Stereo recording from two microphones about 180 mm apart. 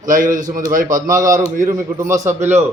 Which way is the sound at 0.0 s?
45° right (ahead or behind).